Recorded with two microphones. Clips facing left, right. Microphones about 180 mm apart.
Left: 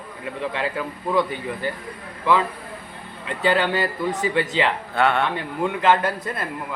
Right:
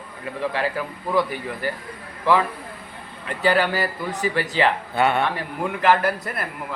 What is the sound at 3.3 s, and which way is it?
A man's voice, 25° left (ahead or behind).